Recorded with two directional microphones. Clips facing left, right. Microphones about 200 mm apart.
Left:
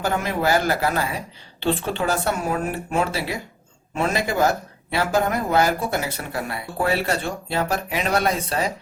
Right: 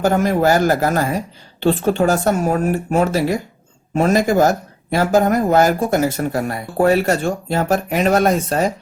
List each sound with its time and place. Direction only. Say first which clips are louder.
0.0 s speech: right 7 dB; 45° right (ahead or behind)